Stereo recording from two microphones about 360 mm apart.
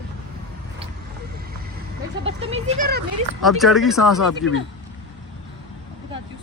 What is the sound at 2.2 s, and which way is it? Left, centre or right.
Speech, centre.